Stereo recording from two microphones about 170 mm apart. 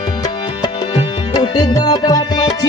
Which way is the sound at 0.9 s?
25° left (ahead or behind).